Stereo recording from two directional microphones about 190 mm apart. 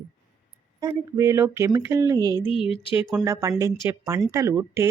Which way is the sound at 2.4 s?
30° left (ahead or behind).